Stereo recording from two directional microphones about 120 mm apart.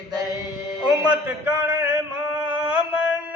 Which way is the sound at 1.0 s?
15° right (ahead or behind).